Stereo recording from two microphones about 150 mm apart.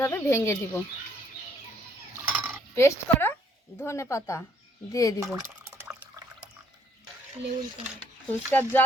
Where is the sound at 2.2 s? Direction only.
10° right (ahead or behind).